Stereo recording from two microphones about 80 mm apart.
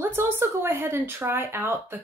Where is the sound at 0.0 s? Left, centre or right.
Right.